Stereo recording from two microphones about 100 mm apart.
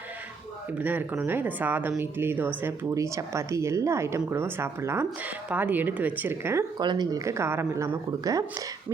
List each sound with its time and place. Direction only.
0.7 s a woman's voice: 15° right (ahead or behind)
2.9 s a woman's voice: 30° right (ahead or behind)
6.7 s speech: 45° right (ahead or behind)
7.3 s a woman's voice: 25° right (ahead or behind)
8.2 s speech: 35° right (ahead or behind)